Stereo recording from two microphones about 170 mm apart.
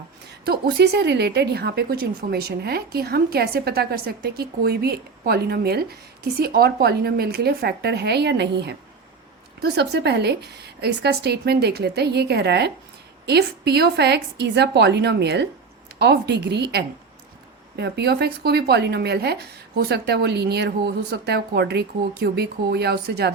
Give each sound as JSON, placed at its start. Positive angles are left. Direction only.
{"t": 0.4, "sound": "a woman's voice", "side_deg": -75}